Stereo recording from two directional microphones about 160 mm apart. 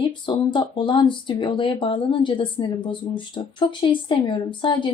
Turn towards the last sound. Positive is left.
turn(degrees=30)  # may be behind; listen again after turning